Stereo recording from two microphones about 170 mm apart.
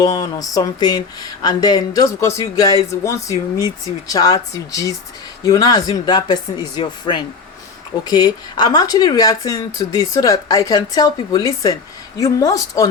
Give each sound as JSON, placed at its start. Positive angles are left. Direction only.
{"t": 0.0, "sound": "speech", "side_deg": 25}